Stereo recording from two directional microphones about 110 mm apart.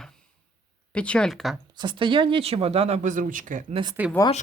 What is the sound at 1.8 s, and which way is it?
Speech, 45° right (ahead or behind).